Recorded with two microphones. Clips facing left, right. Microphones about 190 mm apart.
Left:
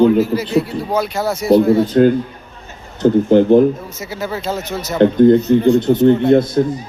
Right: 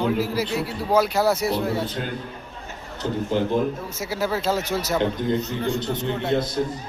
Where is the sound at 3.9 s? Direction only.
5° right (ahead or behind).